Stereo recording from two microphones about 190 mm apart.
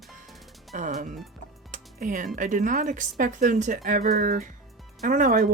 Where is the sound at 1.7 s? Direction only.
45° right (ahead or behind).